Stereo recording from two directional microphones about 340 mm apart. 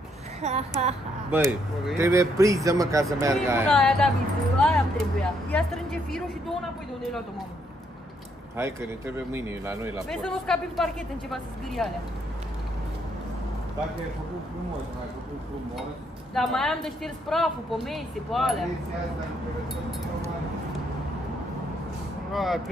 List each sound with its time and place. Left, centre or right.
0.4 s a woman's voice: centre
1.3 s a man's voice: centre
8.5 s a man's voice: centre
16.3 s a man's voice: centre
22.3 s speech: centre